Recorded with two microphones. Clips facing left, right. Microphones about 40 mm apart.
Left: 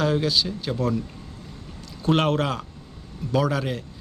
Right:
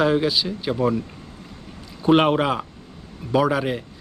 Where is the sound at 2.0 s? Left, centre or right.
Centre.